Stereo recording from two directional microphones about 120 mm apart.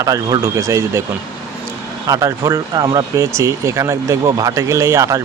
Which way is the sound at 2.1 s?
25° right (ahead or behind).